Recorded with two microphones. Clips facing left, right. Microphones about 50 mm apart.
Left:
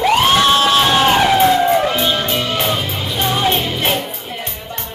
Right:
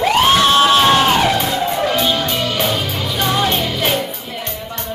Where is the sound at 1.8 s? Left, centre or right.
Centre.